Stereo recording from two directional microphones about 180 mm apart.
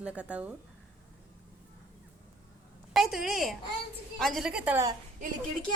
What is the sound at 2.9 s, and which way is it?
A woman's voice, centre (ahead or behind).